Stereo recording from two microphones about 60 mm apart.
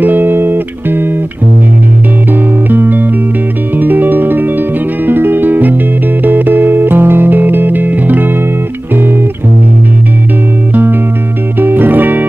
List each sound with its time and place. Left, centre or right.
0.0 s music: right
2.7 s music: right
10.7 s music: right